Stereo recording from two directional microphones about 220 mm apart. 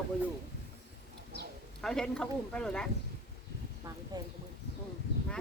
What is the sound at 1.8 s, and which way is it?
Speech, centre (ahead or behind).